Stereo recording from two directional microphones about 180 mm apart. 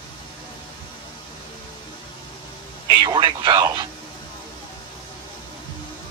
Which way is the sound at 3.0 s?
25° right (ahead or behind).